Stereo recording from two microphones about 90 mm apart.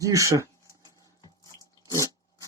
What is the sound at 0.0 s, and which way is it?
Speech, 35° right (ahead or behind).